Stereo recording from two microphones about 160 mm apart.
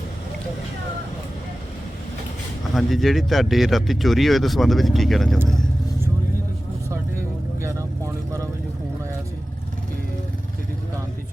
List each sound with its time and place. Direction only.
2.7 s speech: centre (ahead or behind)
6.8 s vehicle: 15° right (ahead or behind)